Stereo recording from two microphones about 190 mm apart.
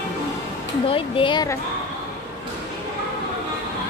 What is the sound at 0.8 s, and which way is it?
Speech, 25° left (ahead or behind).